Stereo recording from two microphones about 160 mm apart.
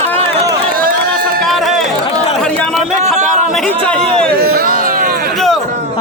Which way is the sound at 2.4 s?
5° left (ahead or behind).